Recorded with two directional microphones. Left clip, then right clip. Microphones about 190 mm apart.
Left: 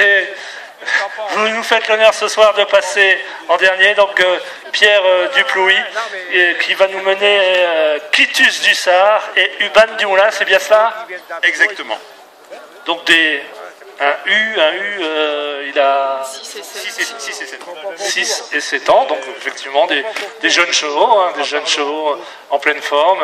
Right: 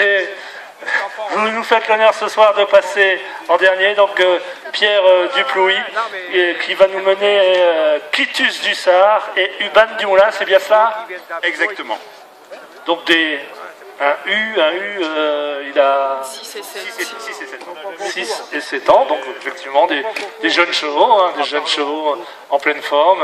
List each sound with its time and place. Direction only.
0.0 s battle cry: 20° left (ahead or behind)
0.8 s speech: 20° left (ahead or behind)